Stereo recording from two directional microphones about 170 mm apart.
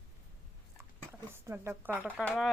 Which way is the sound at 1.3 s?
15° right (ahead or behind).